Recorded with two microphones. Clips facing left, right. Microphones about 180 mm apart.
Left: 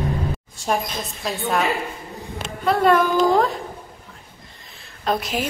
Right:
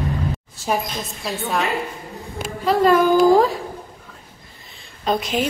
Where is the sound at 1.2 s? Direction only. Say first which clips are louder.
Left 1 dB; centre (ahead or behind).